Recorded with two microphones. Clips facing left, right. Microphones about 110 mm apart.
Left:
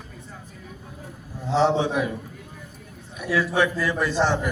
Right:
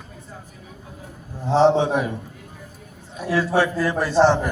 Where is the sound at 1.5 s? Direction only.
35° right (ahead or behind).